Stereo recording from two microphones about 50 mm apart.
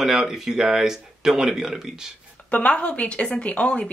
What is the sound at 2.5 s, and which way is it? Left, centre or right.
A woman's voice, left.